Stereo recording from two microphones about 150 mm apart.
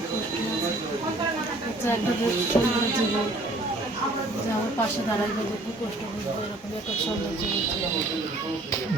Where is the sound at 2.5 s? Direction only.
15° left (ahead or behind).